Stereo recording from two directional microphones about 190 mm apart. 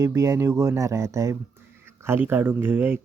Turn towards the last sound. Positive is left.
turn(degrees=-10)  # may be behind; listen again after turning